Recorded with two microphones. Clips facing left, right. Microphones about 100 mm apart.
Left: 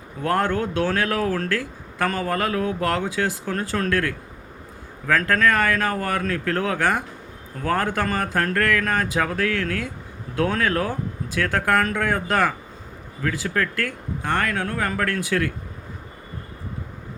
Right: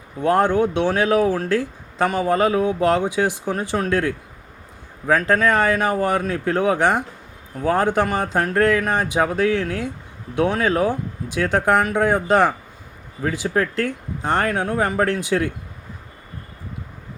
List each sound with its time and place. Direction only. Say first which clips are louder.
0.2 s speech: right 5 dB; 20° right (ahead or behind)